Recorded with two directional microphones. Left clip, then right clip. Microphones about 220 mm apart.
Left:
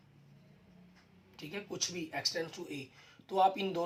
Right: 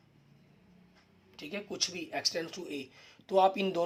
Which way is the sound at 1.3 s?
50° right (ahead or behind).